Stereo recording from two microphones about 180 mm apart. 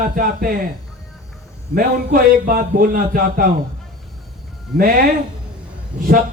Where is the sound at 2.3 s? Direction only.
50° right (ahead or behind).